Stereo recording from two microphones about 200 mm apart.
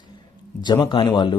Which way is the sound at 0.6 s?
20° left (ahead or behind).